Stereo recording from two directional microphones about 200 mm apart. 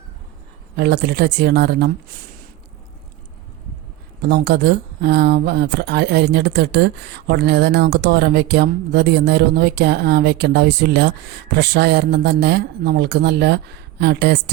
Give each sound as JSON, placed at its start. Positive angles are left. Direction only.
{"t": 0.8, "sound": "speech", "side_deg": -55}
{"t": 4.2, "sound": "speech", "side_deg": -55}